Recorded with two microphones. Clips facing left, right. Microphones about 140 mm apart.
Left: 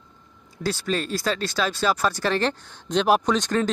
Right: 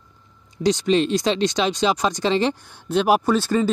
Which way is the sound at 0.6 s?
20° right (ahead or behind).